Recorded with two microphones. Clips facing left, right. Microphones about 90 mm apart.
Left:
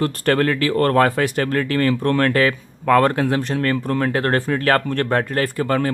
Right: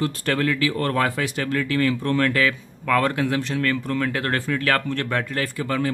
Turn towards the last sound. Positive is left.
turn(degrees=50)  # may be behind; listen again after turning